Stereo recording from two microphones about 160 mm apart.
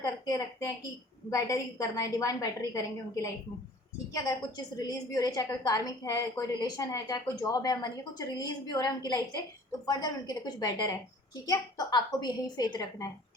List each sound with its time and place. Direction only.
0.0 s a woman's voice: 20° left (ahead or behind)